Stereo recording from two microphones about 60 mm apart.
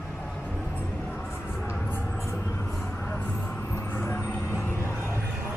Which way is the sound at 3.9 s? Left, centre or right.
Left.